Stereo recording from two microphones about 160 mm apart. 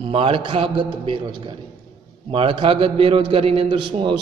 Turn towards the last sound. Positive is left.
turn(degrees=-30)  # may be behind; listen again after turning